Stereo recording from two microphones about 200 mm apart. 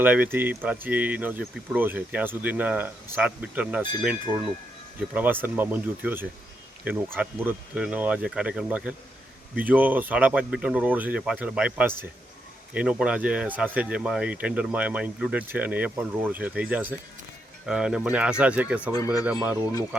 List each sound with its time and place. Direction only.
0.0 s speech: 10° right (ahead or behind)
18.9 s speech: 20° left (ahead or behind)
19.2 s speech: 5° right (ahead or behind)